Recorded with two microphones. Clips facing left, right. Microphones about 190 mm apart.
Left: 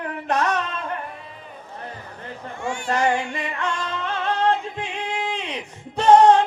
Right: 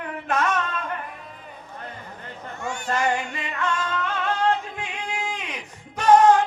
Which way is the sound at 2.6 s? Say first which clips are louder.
Left 3 dB; 40° right (ahead or behind).